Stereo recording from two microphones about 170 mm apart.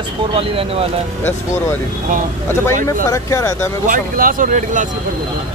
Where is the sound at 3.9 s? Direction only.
55° right (ahead or behind).